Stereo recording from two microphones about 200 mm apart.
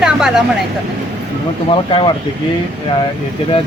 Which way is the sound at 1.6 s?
25° left (ahead or behind).